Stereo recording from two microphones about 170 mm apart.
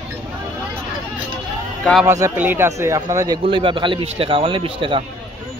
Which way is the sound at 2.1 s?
15° right (ahead or behind).